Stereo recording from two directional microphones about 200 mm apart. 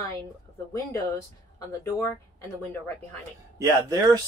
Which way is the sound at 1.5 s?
15° left (ahead or behind).